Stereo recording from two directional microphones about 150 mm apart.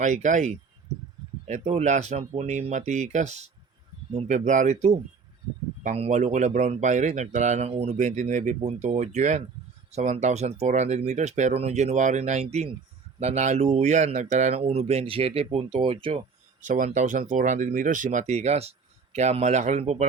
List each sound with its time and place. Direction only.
0.0 s speech: 55° right (ahead or behind); by 16.2 s 40° right (ahead or behind)
16.6 s speech: 60° right (ahead or behind)